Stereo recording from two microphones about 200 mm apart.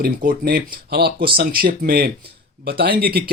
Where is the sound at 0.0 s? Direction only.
45° right (ahead or behind).